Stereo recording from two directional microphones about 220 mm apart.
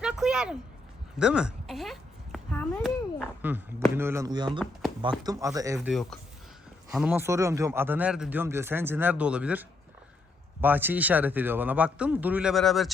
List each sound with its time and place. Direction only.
0.0 s a sound: 5° right (ahead or behind)
3.9 s speech: 10° right (ahead or behind)
5.9 s speech: centre (ahead or behind)